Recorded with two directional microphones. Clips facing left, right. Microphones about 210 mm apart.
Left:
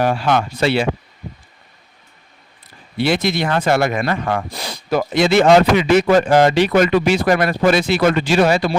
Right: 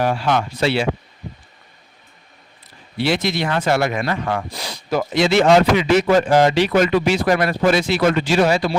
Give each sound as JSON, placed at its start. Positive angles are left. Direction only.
{"t": 0.0, "sound": "speech", "side_deg": 55}
{"t": 3.0, "sound": "speech", "side_deg": 55}